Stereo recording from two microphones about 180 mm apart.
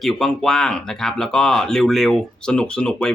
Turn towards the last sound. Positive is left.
turn(degrees=5)  # may be behind; listen again after turning